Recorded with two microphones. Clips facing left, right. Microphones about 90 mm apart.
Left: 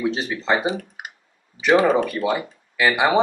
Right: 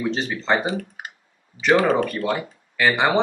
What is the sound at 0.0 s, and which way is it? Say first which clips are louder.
Speech: left 1 dB; 5° left (ahead or behind).